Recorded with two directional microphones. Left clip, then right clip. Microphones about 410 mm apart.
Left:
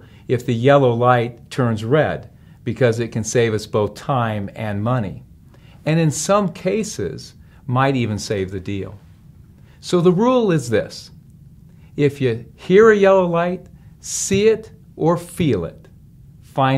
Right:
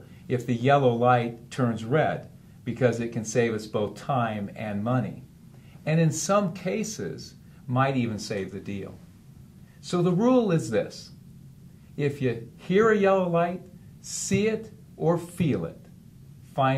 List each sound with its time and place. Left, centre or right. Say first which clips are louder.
0.3 s speech: left 8 dB; left
9.8 s speech: left 8 dB; left
11.9 s speech: left 9 dB; left